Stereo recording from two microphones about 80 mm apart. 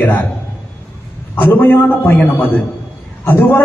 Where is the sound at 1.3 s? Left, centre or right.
Left.